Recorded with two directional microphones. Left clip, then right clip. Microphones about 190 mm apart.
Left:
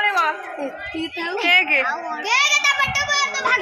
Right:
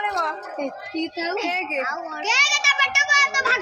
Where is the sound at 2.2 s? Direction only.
55° left (ahead or behind).